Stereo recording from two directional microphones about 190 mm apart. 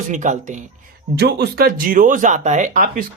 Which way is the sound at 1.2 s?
60° right (ahead or behind).